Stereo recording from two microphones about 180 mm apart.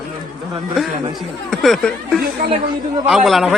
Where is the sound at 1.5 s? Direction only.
Centre (ahead or behind).